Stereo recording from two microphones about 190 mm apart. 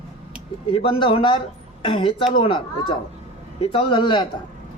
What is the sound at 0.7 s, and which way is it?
Speech, 30° left (ahead or behind).